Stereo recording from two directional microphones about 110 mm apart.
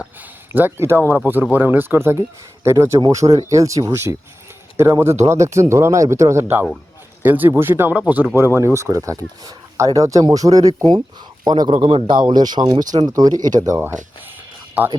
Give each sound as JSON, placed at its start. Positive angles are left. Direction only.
{"t": 0.0, "sound": "a sound", "side_deg": -15}
{"t": 1.5, "sound": "speech", "side_deg": -15}
{"t": 11.8, "sound": "a man's voice", "side_deg": -50}